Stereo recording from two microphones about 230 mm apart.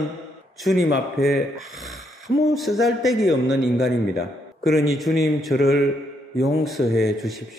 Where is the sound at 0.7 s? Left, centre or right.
Left.